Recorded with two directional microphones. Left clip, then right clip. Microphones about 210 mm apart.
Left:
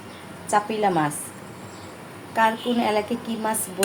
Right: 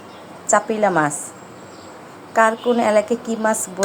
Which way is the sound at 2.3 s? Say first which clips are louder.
Right 5 dB; 20° right (ahead or behind).